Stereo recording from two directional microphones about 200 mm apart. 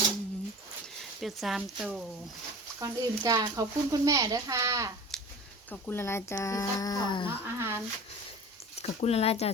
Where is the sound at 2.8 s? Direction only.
15° right (ahead or behind).